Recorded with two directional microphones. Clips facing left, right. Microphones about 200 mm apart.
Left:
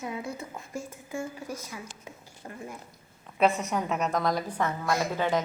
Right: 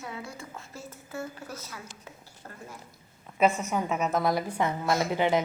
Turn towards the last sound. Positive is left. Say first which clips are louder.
# right 2 dB
turn(degrees=-20)  # may be behind; listen again after turning